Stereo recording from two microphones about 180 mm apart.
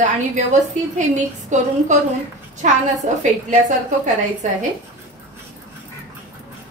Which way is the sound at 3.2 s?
45° right (ahead or behind).